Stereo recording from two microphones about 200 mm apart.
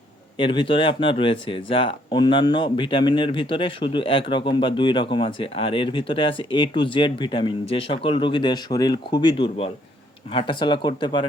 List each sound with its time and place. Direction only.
0.3 s speech: 25° left (ahead or behind)